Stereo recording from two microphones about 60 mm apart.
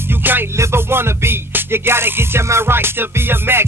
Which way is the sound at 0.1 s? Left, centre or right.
Right.